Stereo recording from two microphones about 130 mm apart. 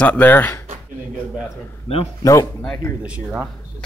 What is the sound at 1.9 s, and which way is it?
Speech, 50° left (ahead or behind).